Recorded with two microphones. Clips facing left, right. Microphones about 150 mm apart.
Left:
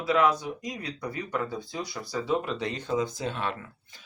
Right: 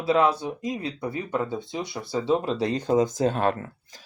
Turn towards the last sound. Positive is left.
turn(degrees=-45)  # may be behind; listen again after turning